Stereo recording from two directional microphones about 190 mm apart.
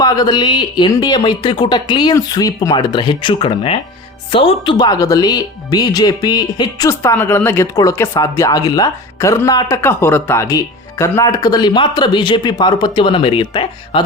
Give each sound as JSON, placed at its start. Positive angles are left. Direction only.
{"t": 0.0, "sound": "speech", "side_deg": 20}